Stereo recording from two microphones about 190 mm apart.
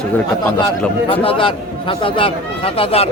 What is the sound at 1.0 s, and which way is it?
A man's voice, 30° left (ahead or behind).